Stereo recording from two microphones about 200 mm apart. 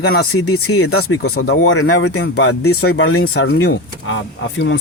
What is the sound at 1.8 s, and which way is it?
Speech, 65° left (ahead or behind).